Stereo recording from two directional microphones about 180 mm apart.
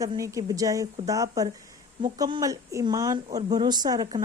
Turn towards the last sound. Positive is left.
turn(degrees=-25)  # may be behind; listen again after turning